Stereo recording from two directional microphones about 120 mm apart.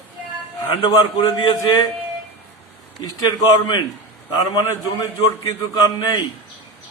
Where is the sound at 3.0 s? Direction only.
40° left (ahead or behind).